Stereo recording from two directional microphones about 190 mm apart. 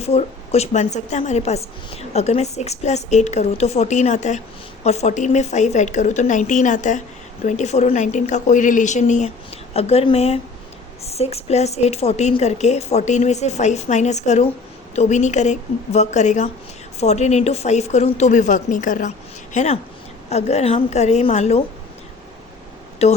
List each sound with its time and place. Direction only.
0.0 s a woman's voice: 35° left (ahead or behind)
23.0 s a woman's voice: 35° left (ahead or behind)